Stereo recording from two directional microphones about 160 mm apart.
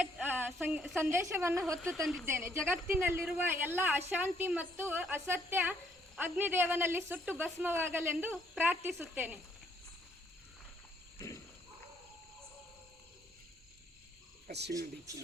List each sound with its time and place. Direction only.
0.0 s a sound: 10° right (ahead or behind)
0.9 s a woman's voice: 15° right (ahead or behind)
1.8 s a woman's voice: 5° left (ahead or behind)
2.2 s a woman's voice: 15° right (ahead or behind)
14.4 s cricket: 90° right
14.7 s speech: 20° right (ahead or behind)